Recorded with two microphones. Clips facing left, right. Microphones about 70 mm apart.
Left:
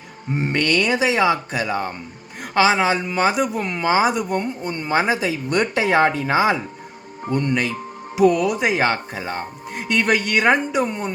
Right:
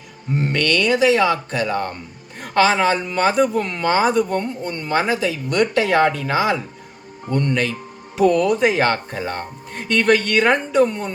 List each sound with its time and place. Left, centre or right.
0.3 s speech: centre